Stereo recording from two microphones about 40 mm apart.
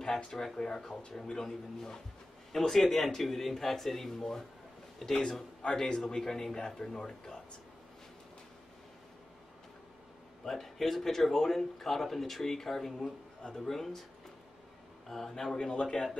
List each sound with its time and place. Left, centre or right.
0.0 s speech: centre
10.4 s a man's voice: centre
15.0 s speech: centre
15.7 s a man's voice: left